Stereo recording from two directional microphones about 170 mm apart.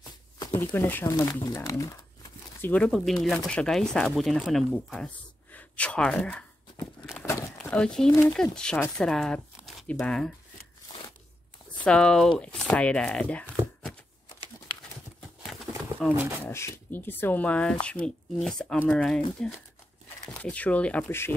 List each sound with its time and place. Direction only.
0.7 s speech: 10° left (ahead or behind)
2.7 s speech: 5° left (ahead or behind)
7.5 s speech: 5° left (ahead or behind)
11.8 s speech: 5° left (ahead or behind)
15.1 s a sound: centre (ahead or behind)
16.2 s speech: 15° right (ahead or behind)
16.4 s speech: 15° left (ahead or behind)
20.3 s speech: 5° left (ahead or behind)